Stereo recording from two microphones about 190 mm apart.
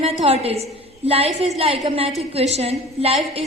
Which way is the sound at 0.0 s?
30° right (ahead or behind).